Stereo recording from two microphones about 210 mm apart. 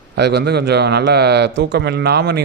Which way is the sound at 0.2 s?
50° right (ahead or behind).